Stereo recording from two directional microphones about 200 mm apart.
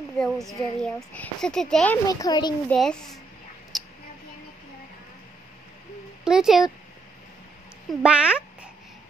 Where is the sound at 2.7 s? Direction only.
5° left (ahead or behind).